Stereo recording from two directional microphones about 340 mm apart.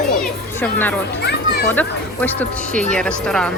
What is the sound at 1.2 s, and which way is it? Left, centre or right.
Children playing, left.